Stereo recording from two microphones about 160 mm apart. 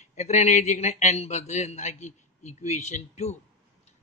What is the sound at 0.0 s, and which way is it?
A man's voice, 45° left (ahead or behind).